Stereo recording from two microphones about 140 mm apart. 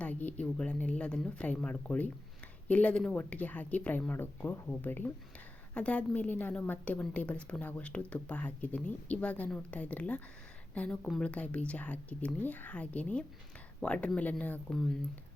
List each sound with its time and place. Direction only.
0.0 s a woman's voice: 10° left (ahead or behind)